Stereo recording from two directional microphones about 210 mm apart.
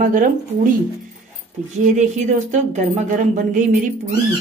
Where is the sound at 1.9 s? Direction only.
35° right (ahead or behind).